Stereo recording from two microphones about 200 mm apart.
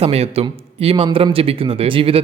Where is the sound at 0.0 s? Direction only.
30° right (ahead or behind).